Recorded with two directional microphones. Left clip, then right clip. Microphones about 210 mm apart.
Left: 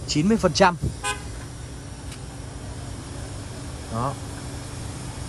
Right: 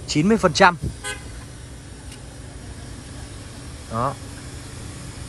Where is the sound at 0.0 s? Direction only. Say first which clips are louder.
Right 3 dB; 10° left (ahead or behind).